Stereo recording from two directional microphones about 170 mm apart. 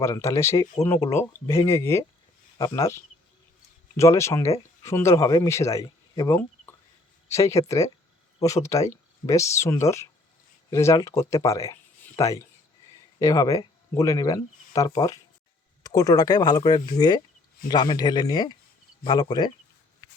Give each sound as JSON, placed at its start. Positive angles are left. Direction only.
{"t": 0.0, "sound": "speech", "side_deg": 15}